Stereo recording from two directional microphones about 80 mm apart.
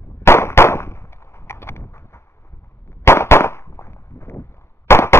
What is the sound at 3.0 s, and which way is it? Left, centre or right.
Firecracker, left.